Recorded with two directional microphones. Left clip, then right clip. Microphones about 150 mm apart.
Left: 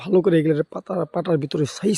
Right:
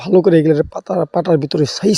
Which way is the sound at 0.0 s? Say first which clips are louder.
Right 7 dB; 35° right (ahead or behind).